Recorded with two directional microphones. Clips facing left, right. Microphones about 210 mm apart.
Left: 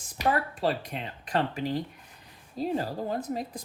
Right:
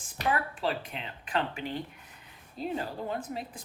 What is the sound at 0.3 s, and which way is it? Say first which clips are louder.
Speech: left 3 dB; 40° left (ahead or behind).